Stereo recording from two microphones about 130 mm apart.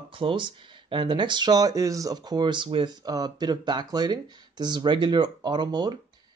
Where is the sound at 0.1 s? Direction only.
40° right (ahead or behind).